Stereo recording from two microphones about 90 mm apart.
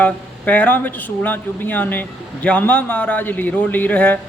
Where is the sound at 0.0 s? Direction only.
15° left (ahead or behind).